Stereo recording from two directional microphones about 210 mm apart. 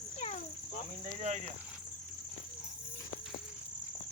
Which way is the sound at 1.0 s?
35° right (ahead or behind).